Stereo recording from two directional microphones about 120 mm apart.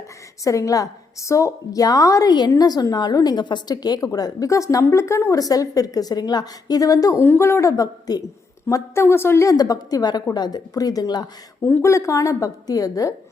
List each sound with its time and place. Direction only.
0.4 s a woman's voice: 30° left (ahead or behind)
11.6 s a woman's voice: 20° left (ahead or behind)